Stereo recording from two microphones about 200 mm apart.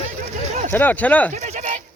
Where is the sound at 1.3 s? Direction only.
35° right (ahead or behind).